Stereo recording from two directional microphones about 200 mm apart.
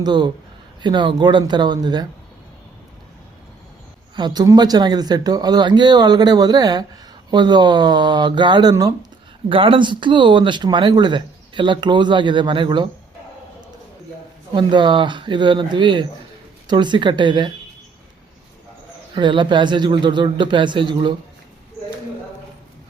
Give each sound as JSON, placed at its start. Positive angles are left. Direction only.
{"t": 0.0, "sound": "speech", "side_deg": -20}
{"t": 4.1, "sound": "speech", "side_deg": -20}
{"t": 14.5, "sound": "speech", "side_deg": -25}
{"t": 19.1, "sound": "speech", "side_deg": -25}